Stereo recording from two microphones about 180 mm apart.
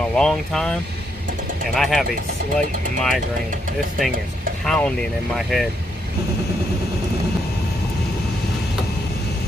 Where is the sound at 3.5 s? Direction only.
45° right (ahead or behind).